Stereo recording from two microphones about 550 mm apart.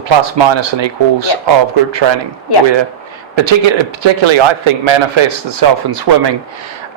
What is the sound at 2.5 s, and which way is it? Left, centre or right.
Speech, left.